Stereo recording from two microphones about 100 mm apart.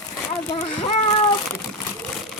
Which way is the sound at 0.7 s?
70° left (ahead or behind).